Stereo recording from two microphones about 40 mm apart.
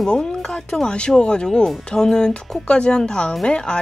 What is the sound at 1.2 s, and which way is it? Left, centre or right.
Speech, left.